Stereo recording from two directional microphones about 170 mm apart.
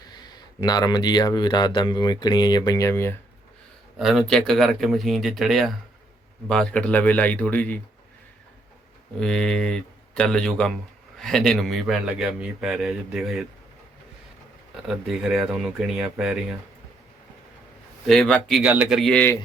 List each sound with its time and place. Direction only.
0.0 s speech: 25° left (ahead or behind)
3.9 s a man's voice: centre (ahead or behind)
9.2 s a man's voice: 5° left (ahead or behind)
14.8 s a man's voice: 5° right (ahead or behind)
18.0 s a man's voice: centre (ahead or behind)